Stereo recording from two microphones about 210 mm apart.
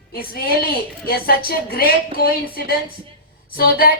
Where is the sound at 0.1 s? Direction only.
45° left (ahead or behind).